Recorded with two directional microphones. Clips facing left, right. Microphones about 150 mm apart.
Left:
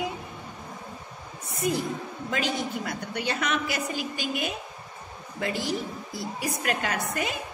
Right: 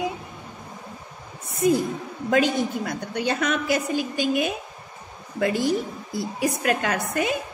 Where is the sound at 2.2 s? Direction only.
50° right (ahead or behind).